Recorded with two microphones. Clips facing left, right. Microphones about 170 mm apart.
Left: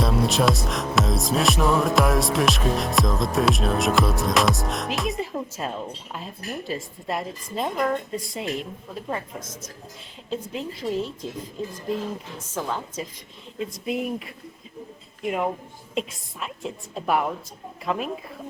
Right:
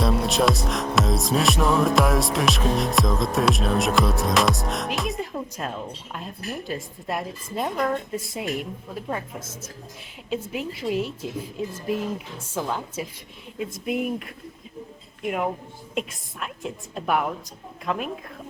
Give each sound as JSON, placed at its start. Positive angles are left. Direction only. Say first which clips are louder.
{"t": 0.0, "sound": "speech", "louder": "even", "side_deg": 0}
{"t": 4.9, "sound": "music", "louder": "left 1 dB", "side_deg": 0}
{"t": 5.3, "sound": "speech", "louder": "left 1 dB", "side_deg": 5}
{"t": 9.4, "sound": "a woman's voice", "louder": "even", "side_deg": -25}
{"t": 10.2, "sound": "a woman's voice", "louder": "right 1 dB", "side_deg": -10}